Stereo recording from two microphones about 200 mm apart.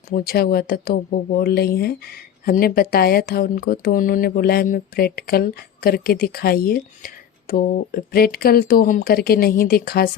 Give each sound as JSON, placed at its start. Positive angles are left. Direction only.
{"t": 0.1, "sound": "speech", "side_deg": 50}